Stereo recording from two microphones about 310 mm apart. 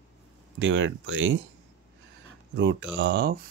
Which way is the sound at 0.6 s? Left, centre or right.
Right.